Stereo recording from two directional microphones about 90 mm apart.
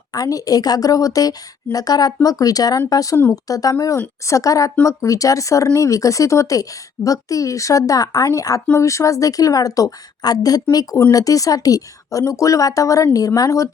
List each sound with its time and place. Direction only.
0.1 s a woman's voice: 40° left (ahead or behind)